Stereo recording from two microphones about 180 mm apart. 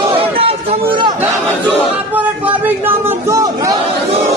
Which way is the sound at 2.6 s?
15° right (ahead or behind).